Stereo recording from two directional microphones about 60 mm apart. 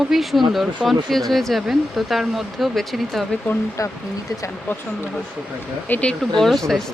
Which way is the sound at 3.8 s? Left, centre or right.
Left.